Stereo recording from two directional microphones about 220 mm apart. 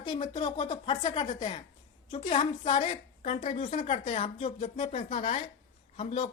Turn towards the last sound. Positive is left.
turn(degrees=30)  # may be behind; listen again after turning